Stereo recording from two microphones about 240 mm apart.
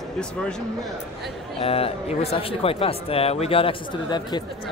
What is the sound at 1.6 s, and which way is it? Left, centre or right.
Speech, left.